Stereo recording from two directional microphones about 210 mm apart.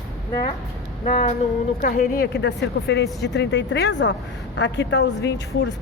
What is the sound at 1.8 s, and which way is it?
A woman's voice, 50° left (ahead or behind).